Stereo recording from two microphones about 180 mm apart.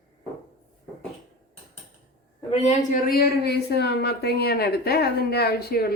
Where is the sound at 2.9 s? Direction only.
55° left (ahead or behind).